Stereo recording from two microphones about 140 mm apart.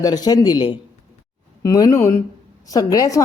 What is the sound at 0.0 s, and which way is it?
A woman's voice, 30° left (ahead or behind).